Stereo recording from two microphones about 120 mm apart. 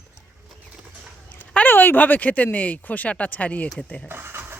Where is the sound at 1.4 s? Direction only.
15° left (ahead or behind).